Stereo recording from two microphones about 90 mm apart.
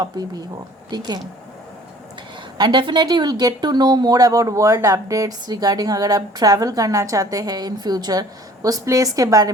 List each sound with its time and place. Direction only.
0.0 s speech: 50° right (ahead or behind)
2.6 s speech: 60° right (ahead or behind); by 9.5 s 40° right (ahead or behind)